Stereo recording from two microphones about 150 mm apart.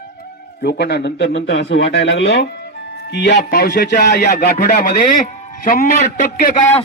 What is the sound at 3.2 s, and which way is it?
A man's voice, 90° left.